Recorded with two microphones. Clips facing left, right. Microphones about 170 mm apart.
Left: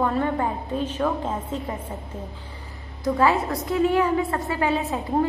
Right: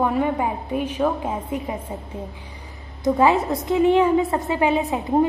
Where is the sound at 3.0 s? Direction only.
20° right (ahead or behind).